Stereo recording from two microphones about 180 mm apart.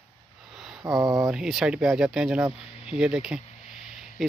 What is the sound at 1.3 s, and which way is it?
Speech, 5° right (ahead or behind).